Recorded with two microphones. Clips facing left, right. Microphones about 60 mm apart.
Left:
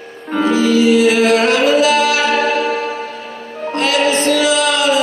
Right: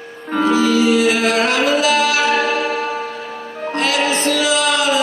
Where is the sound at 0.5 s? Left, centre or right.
Left.